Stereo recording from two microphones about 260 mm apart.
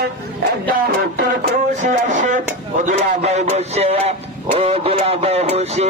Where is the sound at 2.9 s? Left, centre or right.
Right.